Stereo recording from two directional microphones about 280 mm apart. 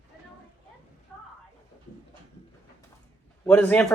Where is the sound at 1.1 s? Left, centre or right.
Centre.